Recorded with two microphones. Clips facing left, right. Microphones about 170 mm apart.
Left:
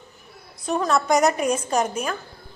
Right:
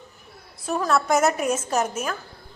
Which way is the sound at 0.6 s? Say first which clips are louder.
Left 1 dB; 5° right (ahead or behind).